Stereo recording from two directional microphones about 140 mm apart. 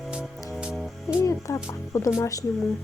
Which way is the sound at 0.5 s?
Centre (ahead or behind).